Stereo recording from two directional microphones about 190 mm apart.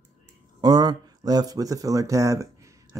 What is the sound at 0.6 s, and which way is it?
Speech, 20° right (ahead or behind).